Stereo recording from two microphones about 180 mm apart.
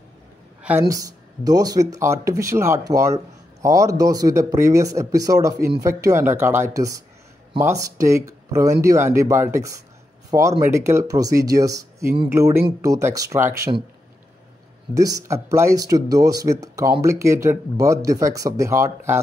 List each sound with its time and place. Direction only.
0.6 s speech: 10° right (ahead or behind)
15.0 s speech: 20° right (ahead or behind)